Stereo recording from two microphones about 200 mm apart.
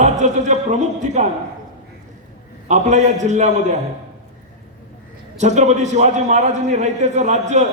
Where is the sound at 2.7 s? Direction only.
35° right (ahead or behind).